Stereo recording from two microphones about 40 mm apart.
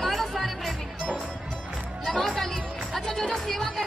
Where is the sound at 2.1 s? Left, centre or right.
Centre.